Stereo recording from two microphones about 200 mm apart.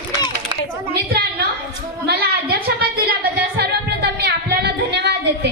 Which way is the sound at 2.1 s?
50° right (ahead or behind).